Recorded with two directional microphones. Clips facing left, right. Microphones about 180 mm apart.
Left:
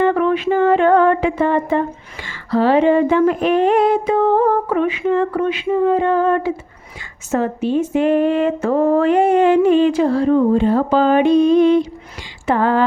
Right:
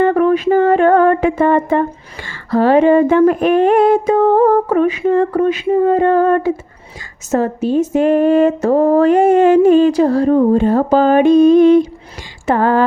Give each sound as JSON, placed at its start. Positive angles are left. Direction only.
{"t": 0.0, "sound": "mantra", "side_deg": -45}
{"t": 2.2, "sound": "speech", "side_deg": -50}